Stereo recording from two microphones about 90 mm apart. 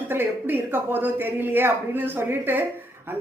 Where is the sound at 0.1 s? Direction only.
20° right (ahead or behind).